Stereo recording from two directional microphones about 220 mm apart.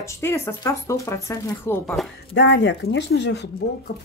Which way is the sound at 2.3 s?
55° left (ahead or behind).